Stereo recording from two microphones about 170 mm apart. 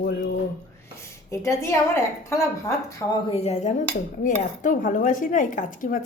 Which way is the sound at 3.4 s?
40° left (ahead or behind).